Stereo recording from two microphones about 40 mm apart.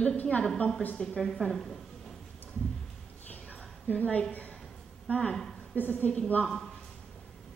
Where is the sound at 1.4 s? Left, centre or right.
Centre.